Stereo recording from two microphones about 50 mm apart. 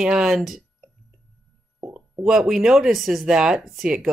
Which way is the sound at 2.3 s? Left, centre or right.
Centre.